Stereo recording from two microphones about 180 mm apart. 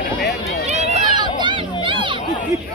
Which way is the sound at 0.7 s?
35° right (ahead or behind).